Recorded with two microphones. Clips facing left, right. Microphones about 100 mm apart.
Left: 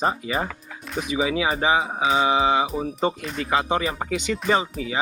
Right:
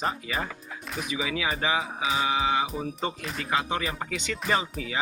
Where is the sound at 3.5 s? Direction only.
20° left (ahead or behind).